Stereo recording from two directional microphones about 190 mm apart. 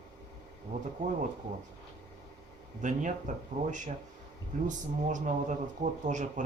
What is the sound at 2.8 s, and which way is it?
Speech, 40° right (ahead or behind).